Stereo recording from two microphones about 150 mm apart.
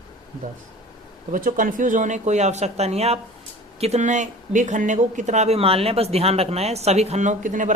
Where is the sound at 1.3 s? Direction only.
65° right (ahead or behind).